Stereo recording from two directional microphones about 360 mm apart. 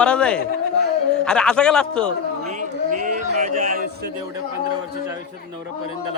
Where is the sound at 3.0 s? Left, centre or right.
Right.